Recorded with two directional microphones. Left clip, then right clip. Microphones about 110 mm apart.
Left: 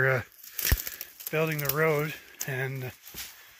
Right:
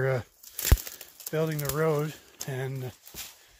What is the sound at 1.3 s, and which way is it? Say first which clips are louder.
Speech: left 1 dB; 35° right (ahead or behind).